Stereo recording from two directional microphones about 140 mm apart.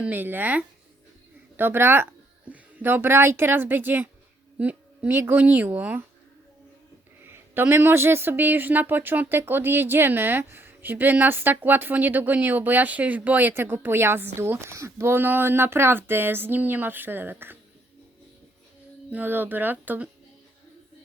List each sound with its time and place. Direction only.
0.0 s a woman's voice: 15° right (ahead or behind)
7.3 s speech: 15° right (ahead or behind)
19.1 s speech: 15° right (ahead or behind)